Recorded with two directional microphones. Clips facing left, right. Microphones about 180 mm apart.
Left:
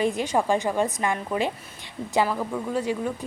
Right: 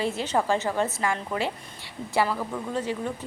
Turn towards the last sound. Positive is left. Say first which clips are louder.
# left 3 dB
turn(degrees=10)  # may be behind; listen again after turning